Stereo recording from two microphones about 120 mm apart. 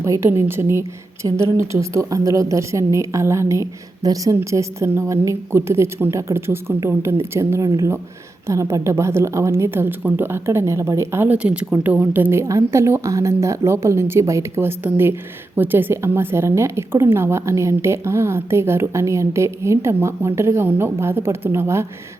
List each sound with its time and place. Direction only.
0.0 s a woman's voice: 20° right (ahead or behind)